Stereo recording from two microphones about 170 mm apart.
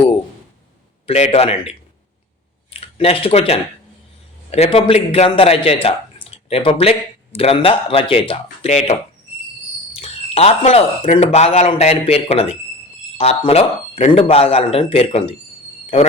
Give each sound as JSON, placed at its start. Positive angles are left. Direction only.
{"t": 1.0, "sound": "speech", "side_deg": 40}